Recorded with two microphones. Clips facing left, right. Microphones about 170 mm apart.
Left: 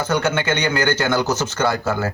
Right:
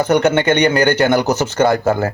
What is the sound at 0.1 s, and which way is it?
Speech, 20° right (ahead or behind).